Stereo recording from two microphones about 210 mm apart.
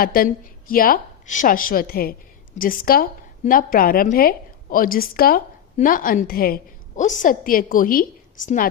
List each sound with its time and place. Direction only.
0.0 s a woman's voice: 45° left (ahead or behind)